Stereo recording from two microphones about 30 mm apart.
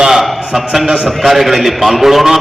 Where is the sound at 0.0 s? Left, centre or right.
Centre.